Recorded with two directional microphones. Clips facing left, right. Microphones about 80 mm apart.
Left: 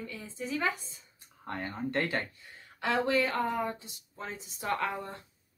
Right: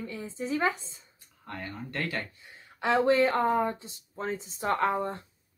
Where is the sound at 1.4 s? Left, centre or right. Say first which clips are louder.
Left 3 dB; left.